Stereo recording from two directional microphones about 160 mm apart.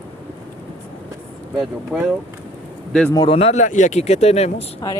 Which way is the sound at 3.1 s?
30° left (ahead or behind).